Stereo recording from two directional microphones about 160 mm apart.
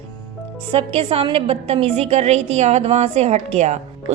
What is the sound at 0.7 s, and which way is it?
A woman's voice, 35° right (ahead or behind).